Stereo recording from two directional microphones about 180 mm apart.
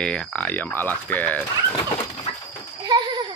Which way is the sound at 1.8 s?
25° left (ahead or behind).